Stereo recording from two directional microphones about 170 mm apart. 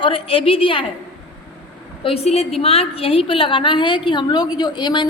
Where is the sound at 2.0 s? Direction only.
35° left (ahead or behind).